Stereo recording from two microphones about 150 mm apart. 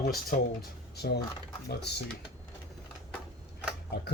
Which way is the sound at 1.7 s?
90° left.